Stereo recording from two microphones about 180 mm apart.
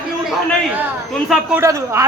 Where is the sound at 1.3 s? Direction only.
5° right (ahead or behind).